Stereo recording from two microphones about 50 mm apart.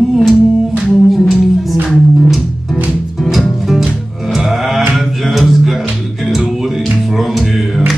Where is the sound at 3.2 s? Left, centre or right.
Centre.